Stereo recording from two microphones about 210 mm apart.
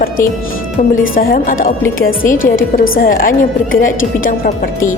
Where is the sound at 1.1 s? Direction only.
40° left (ahead or behind).